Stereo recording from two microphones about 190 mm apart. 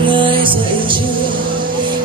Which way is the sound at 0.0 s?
25° right (ahead or behind).